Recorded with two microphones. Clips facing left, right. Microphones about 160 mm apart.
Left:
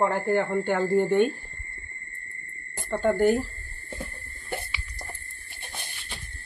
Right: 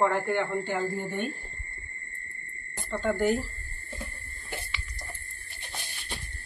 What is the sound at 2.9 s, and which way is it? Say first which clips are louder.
Speech: left 4 dB; 55° left (ahead or behind).